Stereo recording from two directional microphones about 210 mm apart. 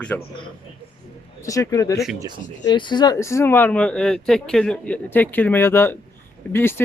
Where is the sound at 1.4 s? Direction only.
15° left (ahead or behind).